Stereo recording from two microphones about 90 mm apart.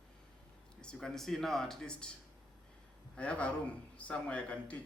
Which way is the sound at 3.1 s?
15° left (ahead or behind).